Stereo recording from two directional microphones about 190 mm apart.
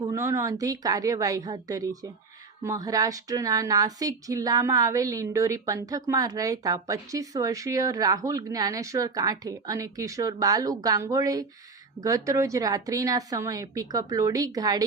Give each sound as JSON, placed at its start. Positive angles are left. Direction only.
{"t": 0.0, "sound": "a woman's voice", "side_deg": -15}